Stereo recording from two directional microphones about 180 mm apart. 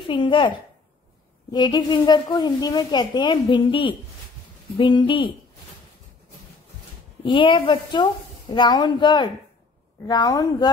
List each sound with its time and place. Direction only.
0.0 s a woman's voice: 25° left (ahead or behind)
7.2 s a woman's voice: 25° left (ahead or behind)